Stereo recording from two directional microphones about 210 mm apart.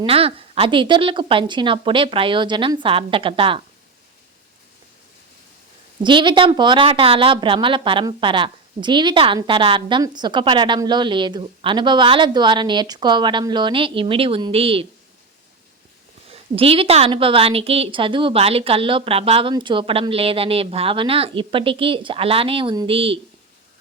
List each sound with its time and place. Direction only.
0.0 s speech: 25° right (ahead or behind)
6.0 s speech: 20° right (ahead or behind)
16.3 s speech: 25° right (ahead or behind)